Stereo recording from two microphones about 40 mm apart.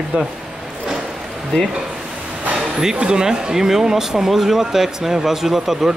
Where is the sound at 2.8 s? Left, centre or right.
Centre.